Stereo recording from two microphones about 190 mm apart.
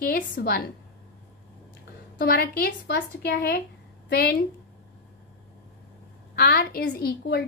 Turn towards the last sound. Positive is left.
turn(degrees=55)  # may be behind; listen again after turning